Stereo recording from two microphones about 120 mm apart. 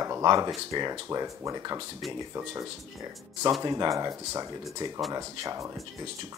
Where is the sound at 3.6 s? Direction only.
30° right (ahead or behind).